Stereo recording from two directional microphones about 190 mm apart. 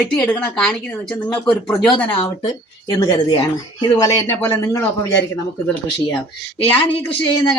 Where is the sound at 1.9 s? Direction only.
20° left (ahead or behind).